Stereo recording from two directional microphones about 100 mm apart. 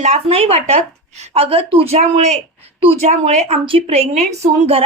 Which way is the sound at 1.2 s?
70° right (ahead or behind).